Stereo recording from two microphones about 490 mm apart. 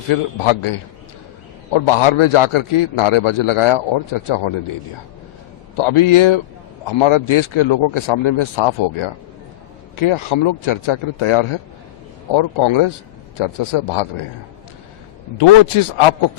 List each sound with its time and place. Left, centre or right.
0.1 s a man's voice: left
5.7 s a man's voice: left
15.4 s a man's voice: left